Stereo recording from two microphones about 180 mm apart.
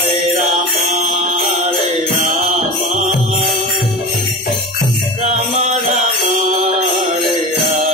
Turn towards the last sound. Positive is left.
turn(degrees=-40)  # may be behind; listen again after turning